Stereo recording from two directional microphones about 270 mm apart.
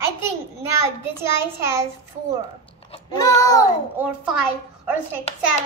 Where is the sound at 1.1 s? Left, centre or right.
Centre.